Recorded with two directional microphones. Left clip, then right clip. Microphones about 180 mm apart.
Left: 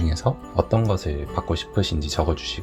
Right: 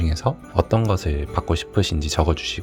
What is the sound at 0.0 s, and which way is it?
Speech, 35° right (ahead or behind).